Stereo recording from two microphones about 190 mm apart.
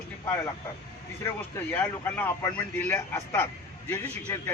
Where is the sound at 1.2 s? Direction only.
10° left (ahead or behind).